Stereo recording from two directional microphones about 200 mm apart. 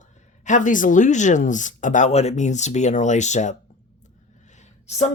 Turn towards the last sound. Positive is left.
turn(degrees=35)  # may be behind; listen again after turning